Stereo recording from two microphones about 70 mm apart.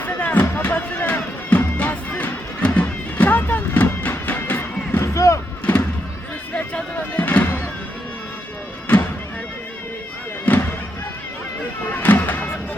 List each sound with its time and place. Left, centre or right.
0.0 s music: left
6.5 s a sound: centre
10.4 s music: left
11.9 s music: left